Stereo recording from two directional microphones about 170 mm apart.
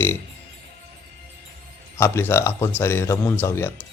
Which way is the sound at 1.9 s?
15° left (ahead or behind).